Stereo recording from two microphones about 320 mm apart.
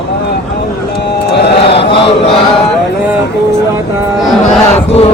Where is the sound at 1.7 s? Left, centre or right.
Centre.